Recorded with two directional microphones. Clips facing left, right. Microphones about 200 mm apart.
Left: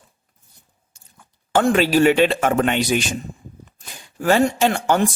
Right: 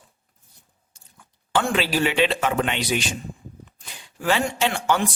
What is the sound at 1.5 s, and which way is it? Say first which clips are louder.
Speech: left 6 dB; 45° left (ahead or behind).